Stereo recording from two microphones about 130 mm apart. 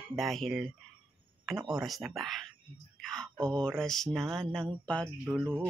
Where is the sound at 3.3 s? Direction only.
25° right (ahead or behind).